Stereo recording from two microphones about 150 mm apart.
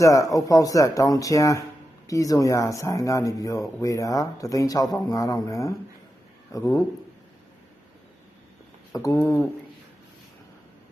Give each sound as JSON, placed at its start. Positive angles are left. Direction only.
{"t": 0.0, "sound": "speech", "side_deg": 20}
{"t": 8.9, "sound": "speech", "side_deg": 20}